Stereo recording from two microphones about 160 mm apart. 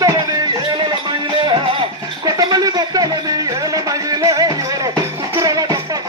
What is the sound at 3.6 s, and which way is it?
Music, 20° right (ahead or behind).